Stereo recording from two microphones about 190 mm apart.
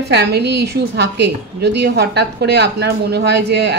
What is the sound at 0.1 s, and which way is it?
A woman's voice, 60° right (ahead or behind).